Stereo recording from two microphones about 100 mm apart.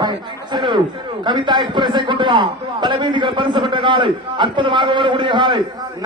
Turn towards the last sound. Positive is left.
turn(degrees=-50)  # may be behind; listen again after turning